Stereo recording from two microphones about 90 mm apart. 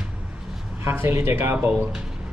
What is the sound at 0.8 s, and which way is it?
A man's voice, 25° right (ahead or behind).